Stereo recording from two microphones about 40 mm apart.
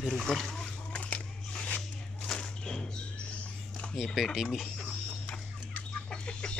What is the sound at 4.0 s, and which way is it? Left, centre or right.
Speech, centre.